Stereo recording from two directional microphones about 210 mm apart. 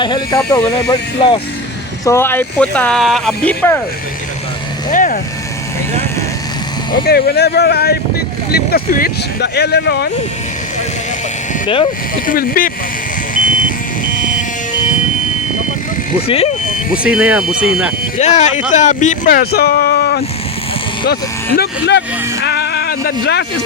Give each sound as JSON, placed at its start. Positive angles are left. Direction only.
{"t": 0.0, "sound": "speech", "side_deg": 20}
{"t": 4.9, "sound": "speech", "side_deg": 40}
{"t": 7.1, "sound": "speech", "side_deg": 50}
{"t": 12.2, "sound": "speech", "side_deg": 40}
{"t": 14.1, "sound": "buzzer", "side_deg": 40}
{"t": 16.2, "sound": "speech", "side_deg": 30}
{"t": 16.9, "sound": "speech", "side_deg": -5}
{"t": 18.2, "sound": "speech", "side_deg": 35}